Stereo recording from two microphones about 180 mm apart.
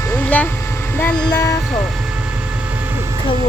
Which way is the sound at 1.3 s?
20° left (ahead or behind).